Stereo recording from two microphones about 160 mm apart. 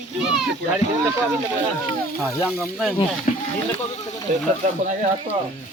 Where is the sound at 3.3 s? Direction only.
55° left (ahead or behind).